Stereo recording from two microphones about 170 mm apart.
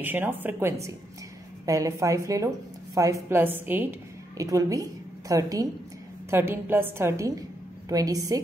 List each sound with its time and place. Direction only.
0.0 s a woman's voice: 10° right (ahead or behind)